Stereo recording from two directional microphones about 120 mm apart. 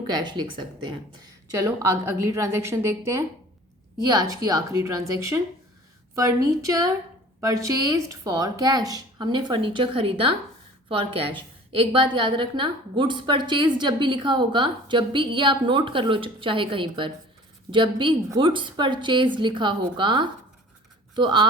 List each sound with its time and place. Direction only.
0.1 s a woman's voice: 40° right (ahead or behind)
1.5 s a woman's voice: 25° right (ahead or behind); by 21.5 s 40° right (ahead or behind)